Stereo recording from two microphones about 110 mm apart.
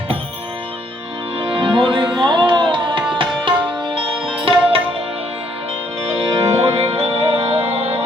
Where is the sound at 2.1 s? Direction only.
45° right (ahead or behind).